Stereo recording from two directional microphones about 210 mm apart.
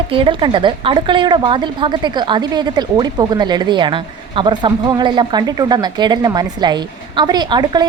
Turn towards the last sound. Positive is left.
turn(degrees=-20)  # may be behind; listen again after turning